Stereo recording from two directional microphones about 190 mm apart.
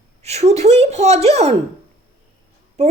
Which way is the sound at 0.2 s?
35° right (ahead or behind).